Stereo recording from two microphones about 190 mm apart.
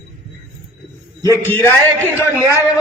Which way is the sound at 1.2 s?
15° left (ahead or behind).